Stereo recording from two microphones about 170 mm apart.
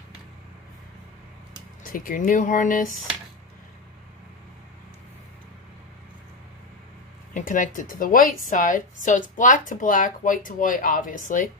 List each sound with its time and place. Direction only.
1.9 s a woman's voice: 55° left (ahead or behind)
7.3 s a woman's voice: 50° left (ahead or behind)